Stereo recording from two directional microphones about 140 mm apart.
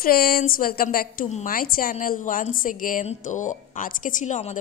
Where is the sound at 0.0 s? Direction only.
90° left; by 3.1 s 75° left (ahead or behind).